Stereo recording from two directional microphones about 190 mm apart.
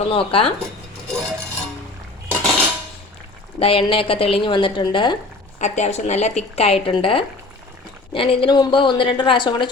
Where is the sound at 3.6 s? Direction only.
30° left (ahead or behind).